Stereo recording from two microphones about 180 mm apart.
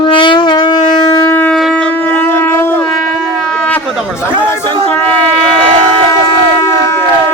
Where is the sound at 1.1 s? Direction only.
15° left (ahead or behind).